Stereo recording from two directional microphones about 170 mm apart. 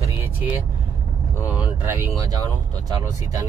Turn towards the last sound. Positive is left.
turn(degrees=-25)  # may be behind; listen again after turning